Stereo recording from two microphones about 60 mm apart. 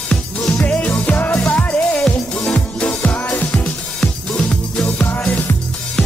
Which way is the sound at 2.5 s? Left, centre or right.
Centre.